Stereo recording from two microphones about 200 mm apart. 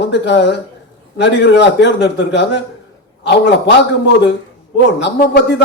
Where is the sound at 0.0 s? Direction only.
60° left (ahead or behind).